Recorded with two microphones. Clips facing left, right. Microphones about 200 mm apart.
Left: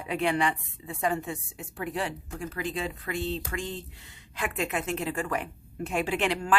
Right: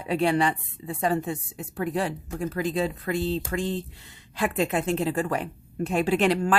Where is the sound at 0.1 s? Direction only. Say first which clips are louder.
Right 4 dB; 35° right (ahead or behind).